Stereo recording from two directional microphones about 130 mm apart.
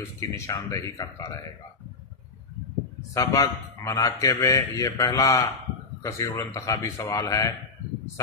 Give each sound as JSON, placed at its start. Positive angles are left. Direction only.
{"t": 0.2, "sound": "a man's voice", "side_deg": 25}
{"t": 3.2, "sound": "a man's voice", "side_deg": 25}